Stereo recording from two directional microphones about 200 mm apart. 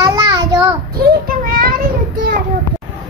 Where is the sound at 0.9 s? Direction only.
45° right (ahead or behind).